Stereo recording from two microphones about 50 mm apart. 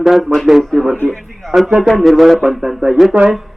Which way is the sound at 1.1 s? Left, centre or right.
Centre.